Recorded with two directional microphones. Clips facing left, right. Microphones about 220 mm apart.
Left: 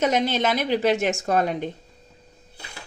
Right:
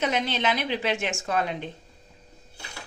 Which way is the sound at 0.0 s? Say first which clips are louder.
Left 5 dB; 45° left (ahead or behind).